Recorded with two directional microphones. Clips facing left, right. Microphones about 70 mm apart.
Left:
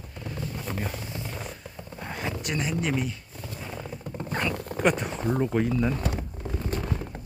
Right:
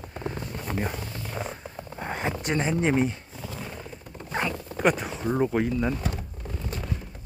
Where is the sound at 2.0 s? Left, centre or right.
Right.